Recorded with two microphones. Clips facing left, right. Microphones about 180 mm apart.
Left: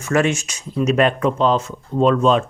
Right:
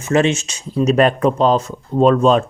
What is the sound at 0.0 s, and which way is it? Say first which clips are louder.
Speech: right 3 dB; 25° right (ahead or behind).